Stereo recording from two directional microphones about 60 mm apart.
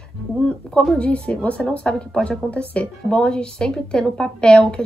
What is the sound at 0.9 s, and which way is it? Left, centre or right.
Speech, left.